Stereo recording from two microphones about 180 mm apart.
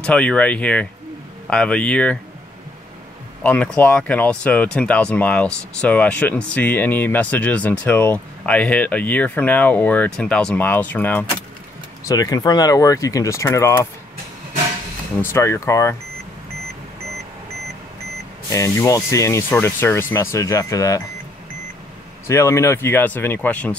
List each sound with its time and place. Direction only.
0.0 s speech: 5° left (ahead or behind)
3.4 s speech: 5° left (ahead or behind)
12.1 s speech: 20° left (ahead or behind)
15.3 s speech: 15° left (ahead or behind)
18.5 s speech: 15° left (ahead or behind)
22.3 s speech: 15° left (ahead or behind)